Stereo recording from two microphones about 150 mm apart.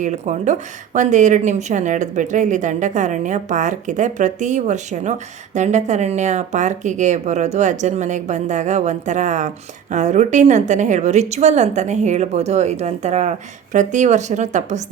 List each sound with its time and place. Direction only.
0.0 s a woman's voice: 55° right (ahead or behind)